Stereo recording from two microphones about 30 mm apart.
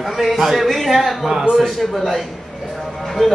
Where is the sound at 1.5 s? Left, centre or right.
Centre.